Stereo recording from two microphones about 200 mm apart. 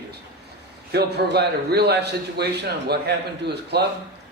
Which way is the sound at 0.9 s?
55° right (ahead or behind).